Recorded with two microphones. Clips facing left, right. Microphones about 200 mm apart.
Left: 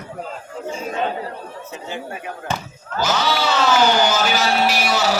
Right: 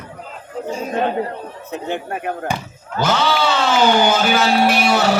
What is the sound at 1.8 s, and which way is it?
A man's voice, 55° right (ahead or behind).